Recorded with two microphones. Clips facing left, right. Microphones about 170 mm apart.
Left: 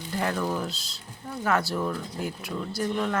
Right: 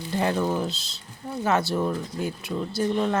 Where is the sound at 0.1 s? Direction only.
25° right (ahead or behind).